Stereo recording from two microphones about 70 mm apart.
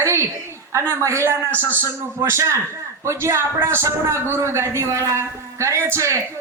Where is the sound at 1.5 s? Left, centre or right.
Left.